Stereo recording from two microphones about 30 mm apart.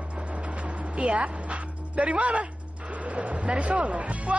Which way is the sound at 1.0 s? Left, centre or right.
Right.